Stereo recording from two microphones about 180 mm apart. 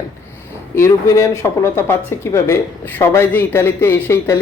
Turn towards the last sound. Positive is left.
turn(degrees=15)  # may be behind; listen again after turning